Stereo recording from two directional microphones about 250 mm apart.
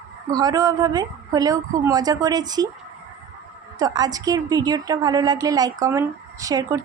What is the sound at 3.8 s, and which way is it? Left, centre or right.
A woman's voice, centre.